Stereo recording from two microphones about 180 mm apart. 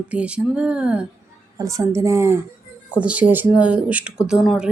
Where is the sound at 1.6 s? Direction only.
15° right (ahead or behind); by 4.7 s centre (ahead or behind).